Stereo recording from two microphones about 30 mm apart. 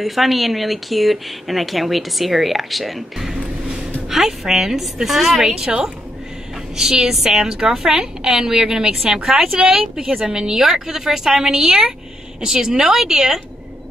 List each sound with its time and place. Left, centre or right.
0.0 s a woman's voice: centre
6.8 s a woman's voice: centre
9.6 s a woman's voice: right
10.5 s a woman's voice: centre